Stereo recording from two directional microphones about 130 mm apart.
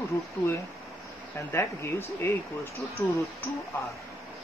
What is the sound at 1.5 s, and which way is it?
Speech, 20° left (ahead or behind).